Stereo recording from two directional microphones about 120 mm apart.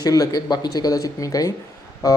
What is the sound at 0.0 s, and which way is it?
Speech, 30° left (ahead or behind).